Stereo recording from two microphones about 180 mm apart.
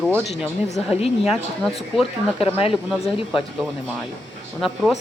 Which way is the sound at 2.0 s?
30° left (ahead or behind).